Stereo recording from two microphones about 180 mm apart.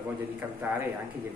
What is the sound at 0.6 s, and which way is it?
Speech, 10° right (ahead or behind).